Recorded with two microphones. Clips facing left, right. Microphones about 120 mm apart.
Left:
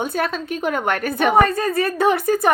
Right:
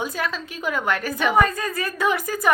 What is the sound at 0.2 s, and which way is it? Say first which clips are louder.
A woman's voice: left 5 dB; 50° left (ahead or behind).